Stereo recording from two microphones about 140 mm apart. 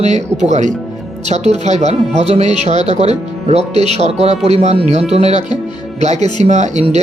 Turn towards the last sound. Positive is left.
turn(degrees=-55)  # may be behind; listen again after turning